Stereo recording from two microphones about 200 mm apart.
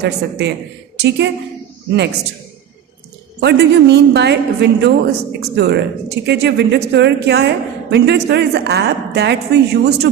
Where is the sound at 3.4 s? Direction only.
55° right (ahead or behind).